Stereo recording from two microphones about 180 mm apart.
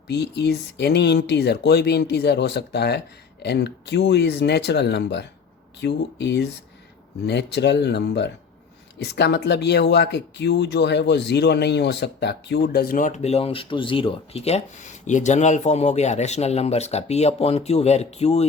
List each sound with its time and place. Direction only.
0.1 s speech: 70° left (ahead or behind); by 18.4 s 35° left (ahead or behind)